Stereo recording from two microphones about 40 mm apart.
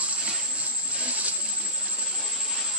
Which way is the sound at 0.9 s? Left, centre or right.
Right.